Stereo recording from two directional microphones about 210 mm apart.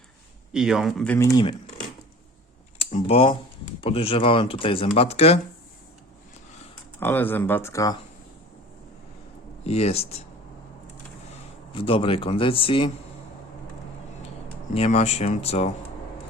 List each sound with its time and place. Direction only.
0.5 s speech: 5° right (ahead or behind); by 1.5 s 20° left (ahead or behind)
2.8 s speech: 30° left (ahead or behind)
7.0 s speech: 10° left (ahead or behind)
9.6 s speech: 30° left (ahead or behind)
11.7 s speech: 25° left (ahead or behind)
14.7 s speech: 30° left (ahead or behind)